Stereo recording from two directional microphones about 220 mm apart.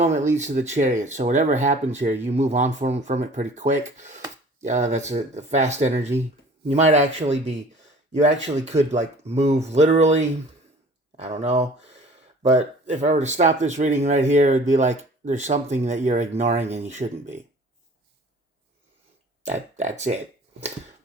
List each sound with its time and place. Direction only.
0.0 s speech: 35° right (ahead or behind)
19.5 s speech: 30° right (ahead or behind)